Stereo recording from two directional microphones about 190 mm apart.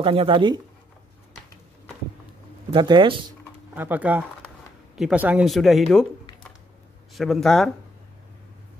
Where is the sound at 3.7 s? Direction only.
10° right (ahead or behind).